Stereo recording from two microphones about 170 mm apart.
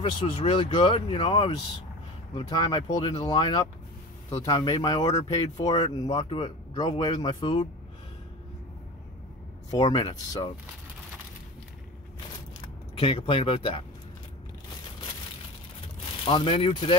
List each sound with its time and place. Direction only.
0.2 s speech: 30° left (ahead or behind)
9.7 s speech: 25° left (ahead or behind)
12.9 s speech: 35° left (ahead or behind)
16.3 s speech: 30° left (ahead or behind)